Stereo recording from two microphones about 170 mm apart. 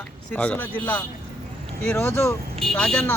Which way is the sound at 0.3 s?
5° left (ahead or behind).